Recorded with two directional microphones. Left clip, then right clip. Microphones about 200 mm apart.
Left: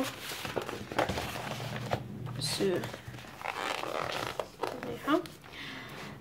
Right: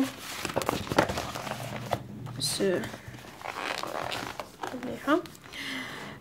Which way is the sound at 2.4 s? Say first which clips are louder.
Right 3 dB; 20° right (ahead or behind).